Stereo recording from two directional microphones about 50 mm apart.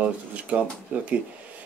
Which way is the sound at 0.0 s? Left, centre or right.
Right.